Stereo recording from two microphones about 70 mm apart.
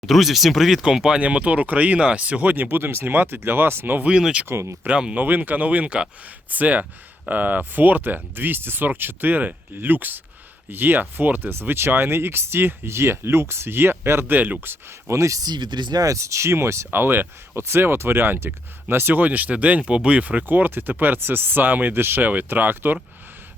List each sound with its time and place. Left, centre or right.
0.0 s speech: centre; by 4.1 s right
4.1 s speech: centre
4.4 s speech: right
4.9 s speech: centre
5.2 s speech: right
15.4 s speech: right
16.0 s speech: right
16.9 s speech: right